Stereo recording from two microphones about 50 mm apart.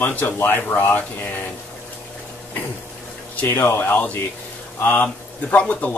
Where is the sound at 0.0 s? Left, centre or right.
Left.